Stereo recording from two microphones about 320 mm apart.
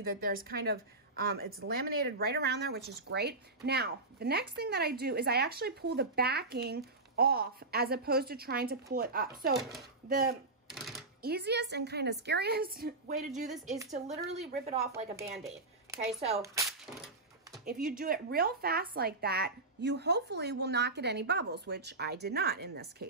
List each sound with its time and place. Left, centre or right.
0.0 s a woman's voice: right
9.6 s speech: centre
10.0 s a woman's voice: right
10.7 s typewriter: centre
11.2 s a woman's voice: right
16.3 s a sound: centre
17.8 s speech: right